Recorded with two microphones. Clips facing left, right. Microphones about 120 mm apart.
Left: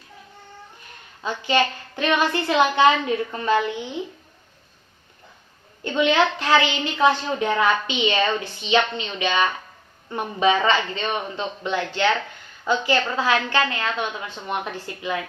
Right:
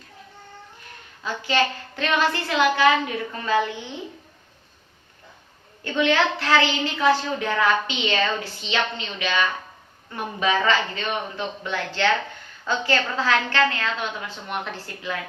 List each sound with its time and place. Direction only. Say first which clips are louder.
1.2 s a woman's voice: left 2 dB; 20° left (ahead or behind)
5.8 s a woman's voice: left 2 dB; 20° left (ahead or behind)